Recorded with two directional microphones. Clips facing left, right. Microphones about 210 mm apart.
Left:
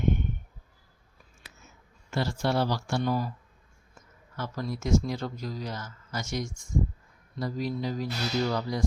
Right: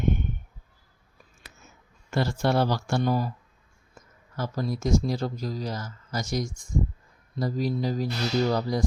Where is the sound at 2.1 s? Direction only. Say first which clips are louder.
Right 3 dB; 50° right (ahead or behind).